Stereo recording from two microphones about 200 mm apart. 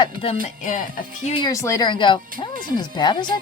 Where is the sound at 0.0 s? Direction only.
30° left (ahead or behind).